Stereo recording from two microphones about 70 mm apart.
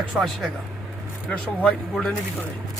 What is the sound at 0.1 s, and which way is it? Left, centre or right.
Speech, centre.